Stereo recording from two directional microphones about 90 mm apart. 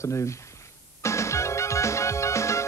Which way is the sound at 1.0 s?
30° left (ahead or behind).